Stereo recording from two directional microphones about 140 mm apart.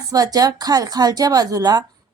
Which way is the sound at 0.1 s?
25° right (ahead or behind).